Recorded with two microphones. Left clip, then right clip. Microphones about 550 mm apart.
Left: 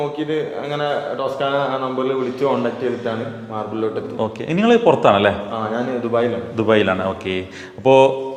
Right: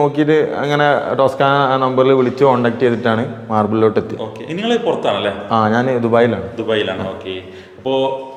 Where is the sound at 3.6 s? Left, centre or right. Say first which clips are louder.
Right 9 dB; right.